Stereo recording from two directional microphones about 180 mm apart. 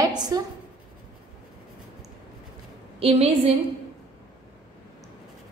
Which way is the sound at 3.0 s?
35° right (ahead or behind).